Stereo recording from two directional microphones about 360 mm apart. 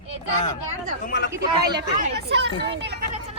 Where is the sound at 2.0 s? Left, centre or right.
Right.